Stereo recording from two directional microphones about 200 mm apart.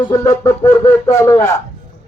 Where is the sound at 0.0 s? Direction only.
15° left (ahead or behind).